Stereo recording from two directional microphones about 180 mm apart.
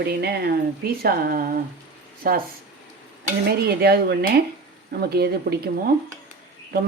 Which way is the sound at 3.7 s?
60° right (ahead or behind).